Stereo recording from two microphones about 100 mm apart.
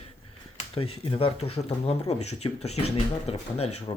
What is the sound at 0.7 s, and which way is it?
Speech, 70° left (ahead or behind).